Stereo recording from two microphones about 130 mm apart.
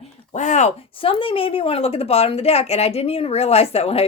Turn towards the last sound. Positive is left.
turn(degrees=50)  # may be behind; listen again after turning